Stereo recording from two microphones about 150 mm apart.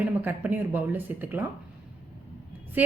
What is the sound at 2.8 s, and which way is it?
Speech, 10° right (ahead or behind).